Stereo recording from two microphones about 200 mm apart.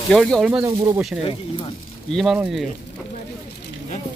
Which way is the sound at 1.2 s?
25° left (ahead or behind).